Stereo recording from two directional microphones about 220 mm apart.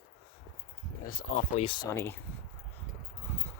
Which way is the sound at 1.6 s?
20° left (ahead or behind).